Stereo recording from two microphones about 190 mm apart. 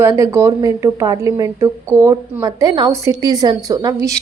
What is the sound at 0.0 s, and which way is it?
A woman's voice, 15° right (ahead or behind).